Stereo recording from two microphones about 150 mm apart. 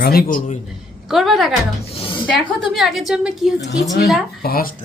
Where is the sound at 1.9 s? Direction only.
35° left (ahead or behind).